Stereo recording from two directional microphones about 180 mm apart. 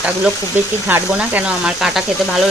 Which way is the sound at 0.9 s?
5° right (ahead or behind).